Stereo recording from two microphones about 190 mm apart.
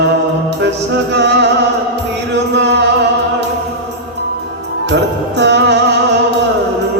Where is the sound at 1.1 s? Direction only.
65° right (ahead or behind).